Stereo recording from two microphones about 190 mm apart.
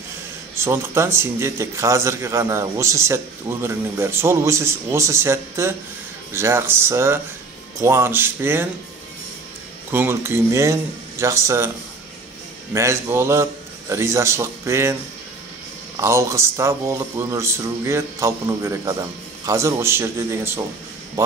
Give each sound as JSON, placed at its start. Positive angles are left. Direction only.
{"t": 0.6, "sound": "a man's voice", "side_deg": -15}
{"t": 9.8, "sound": "a man's voice", "side_deg": -15}
{"t": 12.7, "sound": "a man's voice", "side_deg": -15}
{"t": 16.0, "sound": "a man's voice", "side_deg": -15}